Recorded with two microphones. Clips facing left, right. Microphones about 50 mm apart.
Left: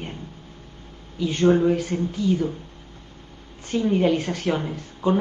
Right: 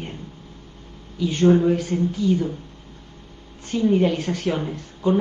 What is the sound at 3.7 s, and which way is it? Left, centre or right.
Speech, centre.